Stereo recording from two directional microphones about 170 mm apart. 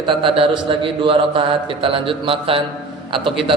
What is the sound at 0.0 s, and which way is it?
Mantra, 30° right (ahead or behind).